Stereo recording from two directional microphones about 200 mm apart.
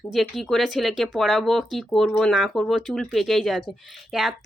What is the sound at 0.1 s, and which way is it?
Speech, centre (ahead or behind).